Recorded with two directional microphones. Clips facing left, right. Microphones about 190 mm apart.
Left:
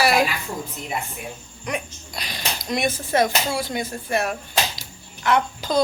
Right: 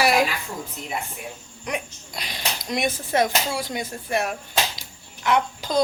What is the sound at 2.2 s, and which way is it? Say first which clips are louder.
Speech: left 1 dB; 20° right (ahead or behind).